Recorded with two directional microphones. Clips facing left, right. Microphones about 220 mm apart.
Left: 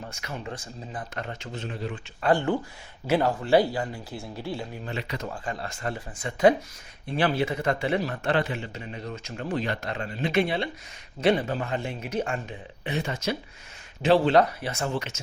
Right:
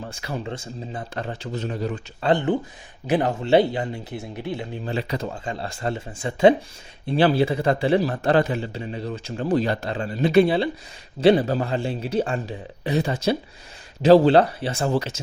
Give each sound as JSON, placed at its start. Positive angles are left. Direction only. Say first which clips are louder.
{"t": 0.1, "sound": "a man's voice", "louder": "right 5 dB", "side_deg": -30}
{"t": 2.2, "sound": "speech", "louder": "right 3 dB", "side_deg": -20}
{"t": 4.9, "sound": "a man's voice", "louder": "right 8 dB", "side_deg": -35}